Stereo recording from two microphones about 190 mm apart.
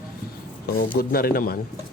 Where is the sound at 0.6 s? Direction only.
50° left (ahead or behind).